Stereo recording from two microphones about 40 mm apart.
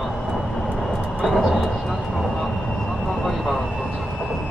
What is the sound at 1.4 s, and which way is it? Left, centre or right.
Speech, centre.